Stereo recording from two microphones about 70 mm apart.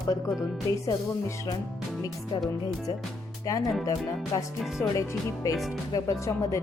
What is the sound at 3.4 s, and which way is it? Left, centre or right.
Speech, left.